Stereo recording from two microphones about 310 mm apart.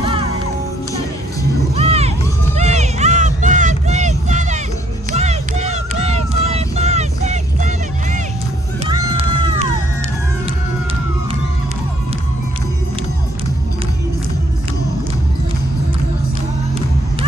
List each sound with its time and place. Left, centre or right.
0.0 s music: centre
1.8 s crowd: centre
5.1 s vehicle: right
8.8 s music: centre